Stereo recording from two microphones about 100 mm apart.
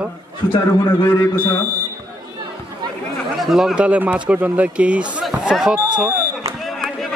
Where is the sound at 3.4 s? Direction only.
Centre (ahead or behind).